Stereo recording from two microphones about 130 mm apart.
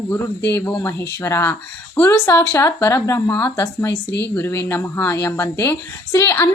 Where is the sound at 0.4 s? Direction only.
20° left (ahead or behind).